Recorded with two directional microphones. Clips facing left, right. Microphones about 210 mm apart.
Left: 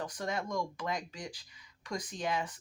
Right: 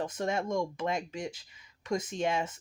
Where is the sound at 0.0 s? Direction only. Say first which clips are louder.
Right 5 dB; 25° right (ahead or behind).